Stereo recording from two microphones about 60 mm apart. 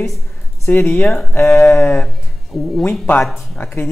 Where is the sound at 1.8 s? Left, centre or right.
Left.